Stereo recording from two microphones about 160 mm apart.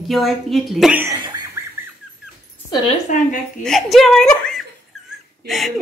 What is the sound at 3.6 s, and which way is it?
A woman's voice, 5° left (ahead or behind).